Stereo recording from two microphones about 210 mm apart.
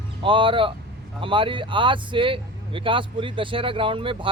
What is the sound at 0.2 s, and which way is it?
Speech, 25° right (ahead or behind).